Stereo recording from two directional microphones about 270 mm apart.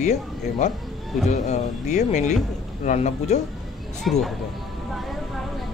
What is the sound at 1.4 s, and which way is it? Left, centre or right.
Speech, left.